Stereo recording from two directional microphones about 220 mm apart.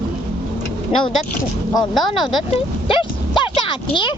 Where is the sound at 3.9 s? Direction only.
20° left (ahead or behind).